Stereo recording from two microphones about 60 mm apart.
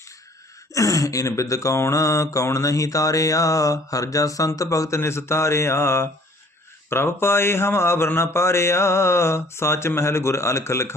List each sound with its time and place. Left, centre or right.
0.7 s speech: left
4.9 s speech: left